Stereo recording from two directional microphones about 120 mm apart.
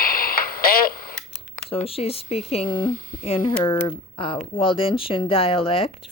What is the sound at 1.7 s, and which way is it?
Speech, 55° left (ahead or behind).